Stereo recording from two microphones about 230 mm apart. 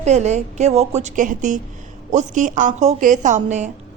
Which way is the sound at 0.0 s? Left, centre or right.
Right.